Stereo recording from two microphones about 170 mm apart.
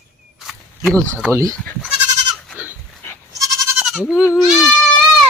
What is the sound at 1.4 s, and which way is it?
Speech, 5° left (ahead or behind).